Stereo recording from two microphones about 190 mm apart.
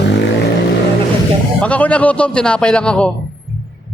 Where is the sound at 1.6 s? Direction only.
5° left (ahead or behind).